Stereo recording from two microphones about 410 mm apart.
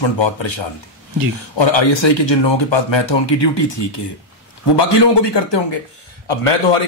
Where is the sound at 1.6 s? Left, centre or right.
Left.